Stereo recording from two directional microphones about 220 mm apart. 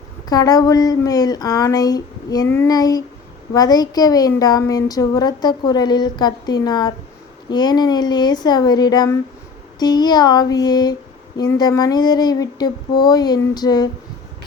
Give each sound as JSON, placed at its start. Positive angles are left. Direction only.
{"t": 0.3, "sound": "a woman's voice", "side_deg": 15}